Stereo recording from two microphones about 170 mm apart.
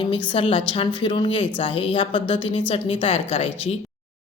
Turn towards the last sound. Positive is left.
turn(degrees=35)  # may be behind; listen again after turning